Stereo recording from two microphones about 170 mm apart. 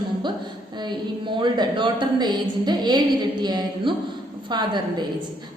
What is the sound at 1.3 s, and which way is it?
A woman's voice, 25° right (ahead or behind).